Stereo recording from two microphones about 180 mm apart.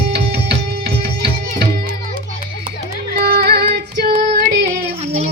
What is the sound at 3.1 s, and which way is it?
Music, 55° right (ahead or behind).